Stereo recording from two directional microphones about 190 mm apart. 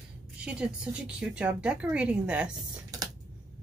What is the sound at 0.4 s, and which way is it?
Speech, 5° right (ahead or behind).